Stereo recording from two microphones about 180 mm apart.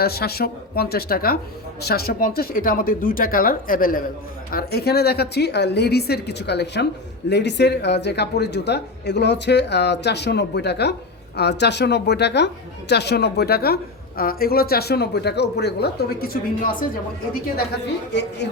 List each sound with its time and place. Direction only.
0.0 s speech: 60° left (ahead or behind)
4.5 s speech: 60° left (ahead or behind)